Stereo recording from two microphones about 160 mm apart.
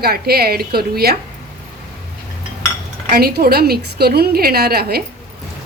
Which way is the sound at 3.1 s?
70° right (ahead or behind).